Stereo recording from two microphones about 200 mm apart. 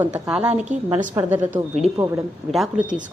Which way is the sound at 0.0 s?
5° right (ahead or behind).